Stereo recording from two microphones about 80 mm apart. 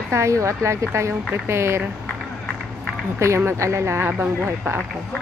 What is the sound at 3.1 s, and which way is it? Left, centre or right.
Speech, right.